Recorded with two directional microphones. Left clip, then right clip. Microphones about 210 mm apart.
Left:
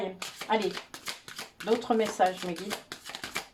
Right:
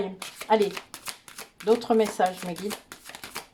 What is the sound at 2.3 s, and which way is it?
Shuffling cards, 30° right (ahead or behind).